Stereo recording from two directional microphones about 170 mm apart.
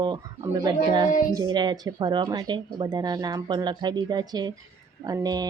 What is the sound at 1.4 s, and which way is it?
Speech, 25° right (ahead or behind).